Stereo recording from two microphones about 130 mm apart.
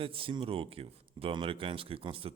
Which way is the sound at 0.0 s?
45° right (ahead or behind).